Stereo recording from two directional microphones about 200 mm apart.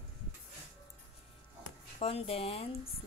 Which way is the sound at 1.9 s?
30° left (ahead or behind).